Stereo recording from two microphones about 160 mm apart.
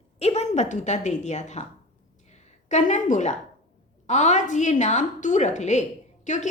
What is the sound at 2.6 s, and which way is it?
A woman's voice, 50° left (ahead or behind).